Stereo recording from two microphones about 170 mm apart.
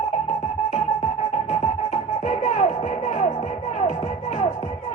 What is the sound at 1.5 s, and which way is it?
Music, 45° left (ahead or behind).